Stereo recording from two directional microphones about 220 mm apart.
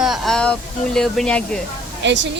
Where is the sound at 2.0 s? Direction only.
55° right (ahead or behind).